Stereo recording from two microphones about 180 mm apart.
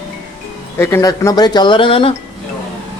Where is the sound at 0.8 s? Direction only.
15° left (ahead or behind); by 2.1 s 30° left (ahead or behind).